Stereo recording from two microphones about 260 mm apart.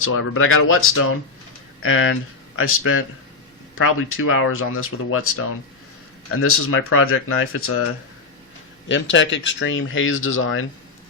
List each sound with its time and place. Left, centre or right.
0.0 s speech: left
6.4 s speech: left
8.9 s speech: left